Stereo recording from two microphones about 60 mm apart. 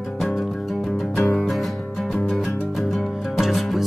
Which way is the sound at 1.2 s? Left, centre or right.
Centre.